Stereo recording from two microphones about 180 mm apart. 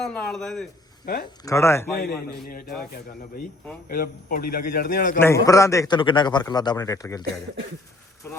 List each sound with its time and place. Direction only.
0.0 s speech: 5° left (ahead or behind)
1.0 s speech: 55° left (ahead or behind)
1.5 s a man's voice: 15° left (ahead or behind)
2.5 s a man's voice: 50° left (ahead or behind)
3.8 s a man's voice: 55° left (ahead or behind)
5.2 s a man's voice: 15° left (ahead or behind)